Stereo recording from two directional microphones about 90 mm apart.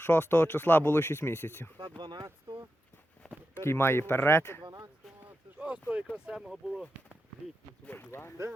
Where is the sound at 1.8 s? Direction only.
60° right (ahead or behind).